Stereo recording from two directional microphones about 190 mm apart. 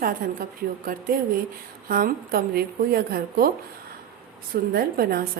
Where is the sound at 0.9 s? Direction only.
45° right (ahead or behind).